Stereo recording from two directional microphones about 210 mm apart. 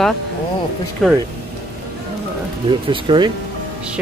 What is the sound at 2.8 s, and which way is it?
Speech, 20° right (ahead or behind).